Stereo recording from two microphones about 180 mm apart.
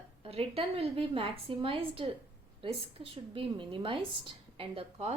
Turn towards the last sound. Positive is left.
turn(degrees=-30)  # may be behind; listen again after turning